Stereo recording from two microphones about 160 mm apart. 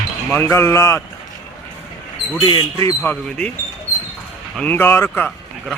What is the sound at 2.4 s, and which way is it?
Speech, 30° left (ahead or behind).